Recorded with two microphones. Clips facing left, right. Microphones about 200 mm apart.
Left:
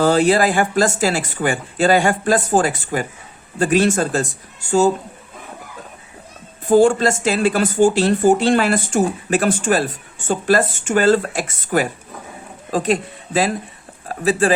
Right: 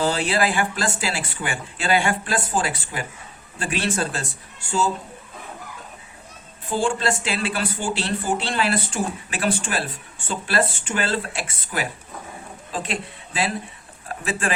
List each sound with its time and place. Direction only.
0.0 s speech: 45° left (ahead or behind)
6.7 s speech: 40° left (ahead or behind)